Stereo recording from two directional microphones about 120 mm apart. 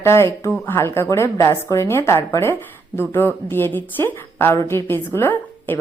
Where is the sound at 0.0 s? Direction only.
20° left (ahead or behind).